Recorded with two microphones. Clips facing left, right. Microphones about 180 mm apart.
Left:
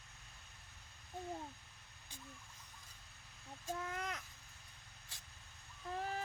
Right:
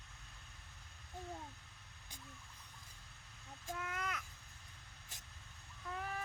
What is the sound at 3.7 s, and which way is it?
Crow, 30° left (ahead or behind).